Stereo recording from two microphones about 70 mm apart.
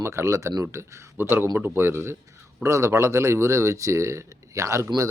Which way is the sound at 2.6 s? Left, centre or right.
Right.